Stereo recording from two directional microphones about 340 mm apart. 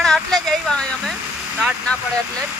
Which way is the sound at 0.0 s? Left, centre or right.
Centre.